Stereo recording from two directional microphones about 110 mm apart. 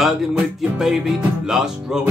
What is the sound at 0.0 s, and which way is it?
Music, 5° right (ahead or behind).